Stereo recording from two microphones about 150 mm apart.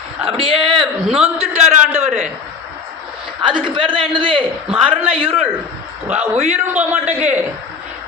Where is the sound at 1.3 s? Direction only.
45° right (ahead or behind).